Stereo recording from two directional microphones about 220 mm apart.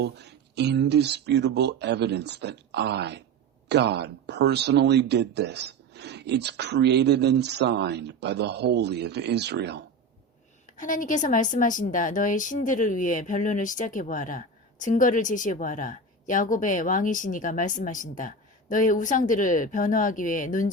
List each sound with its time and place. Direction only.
0.0 s speech: 50° right (ahead or behind)
10.7 s a woman's voice: 35° left (ahead or behind)